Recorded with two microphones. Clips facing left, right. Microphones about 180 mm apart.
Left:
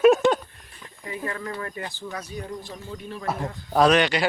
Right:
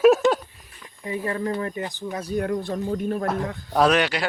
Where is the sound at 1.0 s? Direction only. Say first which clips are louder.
Right 6 dB; 30° right (ahead or behind).